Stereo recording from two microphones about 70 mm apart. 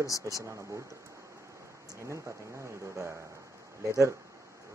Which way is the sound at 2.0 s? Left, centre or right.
Right.